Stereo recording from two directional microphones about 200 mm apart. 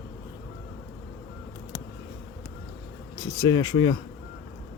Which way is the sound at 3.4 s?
20° left (ahead or behind).